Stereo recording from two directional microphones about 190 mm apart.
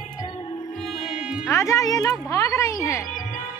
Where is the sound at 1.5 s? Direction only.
15° left (ahead or behind).